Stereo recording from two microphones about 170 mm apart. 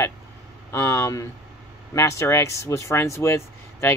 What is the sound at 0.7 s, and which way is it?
Vehicle, 15° left (ahead or behind).